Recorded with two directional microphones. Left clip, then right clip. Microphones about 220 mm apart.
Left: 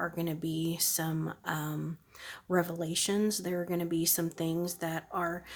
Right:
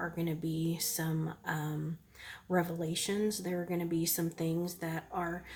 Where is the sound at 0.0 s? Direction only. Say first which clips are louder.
Left 3 dB; 35° left (ahead or behind).